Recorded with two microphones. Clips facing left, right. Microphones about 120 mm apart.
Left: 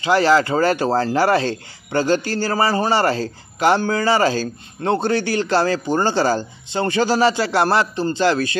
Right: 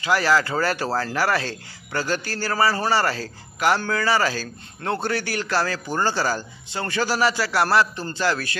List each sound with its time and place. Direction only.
0.0 s speech: 25° left (ahead or behind)